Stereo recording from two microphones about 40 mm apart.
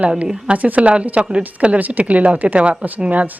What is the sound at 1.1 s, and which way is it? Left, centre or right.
Speech, right.